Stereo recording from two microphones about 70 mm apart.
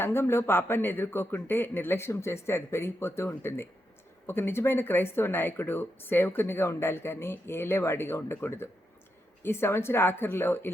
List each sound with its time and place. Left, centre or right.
0.0 s speech: left